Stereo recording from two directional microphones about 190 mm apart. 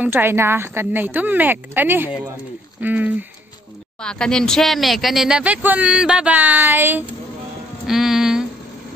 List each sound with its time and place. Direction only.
0.0 s a woman's voice: 10° right (ahead or behind)
4.0 s speech: 5° left (ahead or behind)
7.8 s music: centre (ahead or behind)